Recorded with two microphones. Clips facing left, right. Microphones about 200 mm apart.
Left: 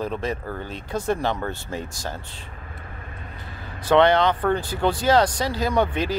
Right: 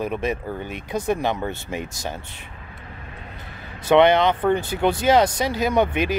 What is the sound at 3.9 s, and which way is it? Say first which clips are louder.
Speech: right 2 dB; 20° right (ahead or behind).